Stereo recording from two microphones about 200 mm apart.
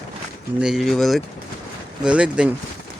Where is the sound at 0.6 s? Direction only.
Centre (ahead or behind).